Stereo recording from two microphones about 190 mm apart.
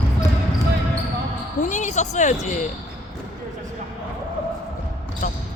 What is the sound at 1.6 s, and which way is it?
Speech, 40° left (ahead or behind).